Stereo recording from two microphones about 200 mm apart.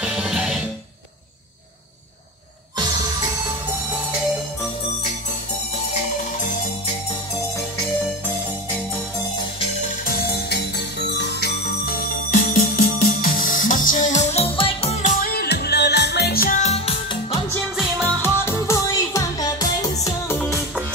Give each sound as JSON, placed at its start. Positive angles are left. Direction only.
{"t": 0.0, "sound": "music", "side_deg": -5}
{"t": 10.0, "sound": "music", "side_deg": 55}
{"t": 17.7, "sound": "music", "side_deg": 0}
{"t": 18.2, "sound": "music", "side_deg": 10}
{"t": 20.3, "sound": "music", "side_deg": 5}